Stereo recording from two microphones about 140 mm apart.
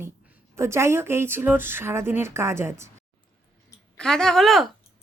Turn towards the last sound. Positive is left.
turn(degrees=0)  # may be behind; listen again after turning